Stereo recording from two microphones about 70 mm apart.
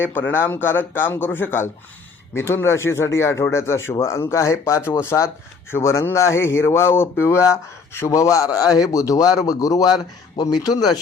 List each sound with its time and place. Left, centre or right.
0.0 s a man's voice: left